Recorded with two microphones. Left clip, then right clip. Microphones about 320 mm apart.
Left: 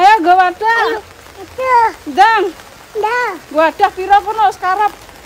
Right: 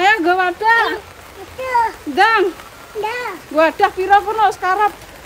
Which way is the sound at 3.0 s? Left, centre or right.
Centre.